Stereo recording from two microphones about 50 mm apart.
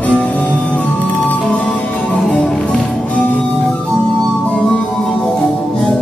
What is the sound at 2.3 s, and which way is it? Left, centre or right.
Music, centre.